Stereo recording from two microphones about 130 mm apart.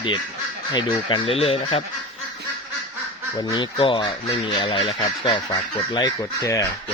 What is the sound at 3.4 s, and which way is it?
Speech, 35° left (ahead or behind).